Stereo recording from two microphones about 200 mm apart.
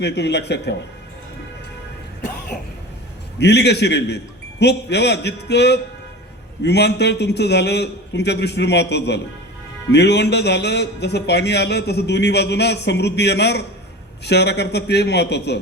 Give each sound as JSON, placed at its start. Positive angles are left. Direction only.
{"t": 0.0, "sound": "a man's voice", "side_deg": 55}
{"t": 3.3, "sound": "a man's voice", "side_deg": 55}